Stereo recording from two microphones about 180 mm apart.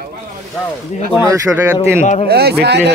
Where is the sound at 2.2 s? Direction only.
65° right (ahead or behind).